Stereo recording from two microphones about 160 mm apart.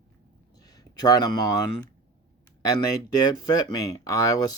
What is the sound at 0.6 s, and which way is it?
Speech, 25° left (ahead or behind).